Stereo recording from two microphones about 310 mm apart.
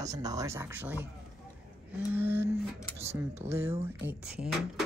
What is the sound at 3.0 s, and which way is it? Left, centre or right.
Speech, right.